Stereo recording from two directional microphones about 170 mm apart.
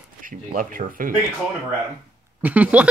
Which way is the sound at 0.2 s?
50° right (ahead or behind).